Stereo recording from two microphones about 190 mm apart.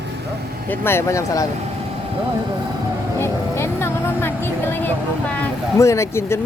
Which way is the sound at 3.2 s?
15° left (ahead or behind).